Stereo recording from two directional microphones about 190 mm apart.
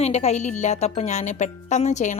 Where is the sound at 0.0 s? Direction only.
35° left (ahead or behind).